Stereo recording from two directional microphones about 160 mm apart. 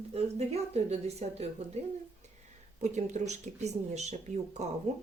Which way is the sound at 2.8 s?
45° right (ahead or behind).